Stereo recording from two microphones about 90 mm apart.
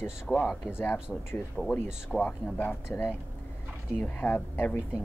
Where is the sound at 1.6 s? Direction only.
10° right (ahead or behind).